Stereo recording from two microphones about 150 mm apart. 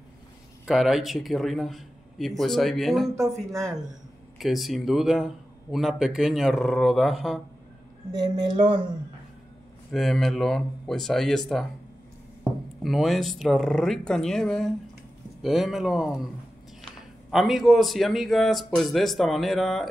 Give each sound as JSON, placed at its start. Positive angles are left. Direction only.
{"t": 0.7, "sound": "speech", "side_deg": 0}
{"t": 3.2, "sound": "speech", "side_deg": -20}
{"t": 4.4, "sound": "speech", "side_deg": 0}
{"t": 8.1, "sound": "speech", "side_deg": -30}
{"t": 9.8, "sound": "speech", "side_deg": 0}
{"t": 12.8, "sound": "speech", "side_deg": 0}
{"t": 17.3, "sound": "speech", "side_deg": 0}